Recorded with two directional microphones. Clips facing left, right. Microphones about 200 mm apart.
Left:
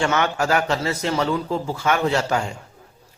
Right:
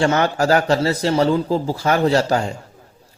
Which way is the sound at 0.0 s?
35° right (ahead or behind).